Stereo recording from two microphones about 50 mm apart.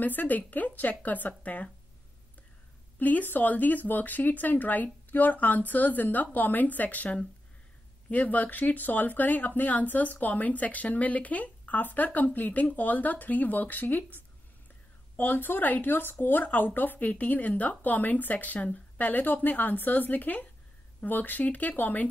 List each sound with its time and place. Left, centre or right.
0.0 s speech: left
3.0 s speech: left